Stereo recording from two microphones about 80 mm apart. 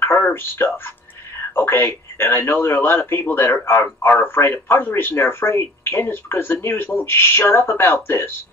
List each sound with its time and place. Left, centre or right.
0.0 s speech: left